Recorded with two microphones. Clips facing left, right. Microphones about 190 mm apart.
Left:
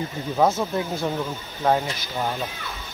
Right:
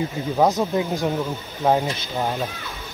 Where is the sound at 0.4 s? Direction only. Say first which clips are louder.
Right 2 dB; 15° right (ahead or behind).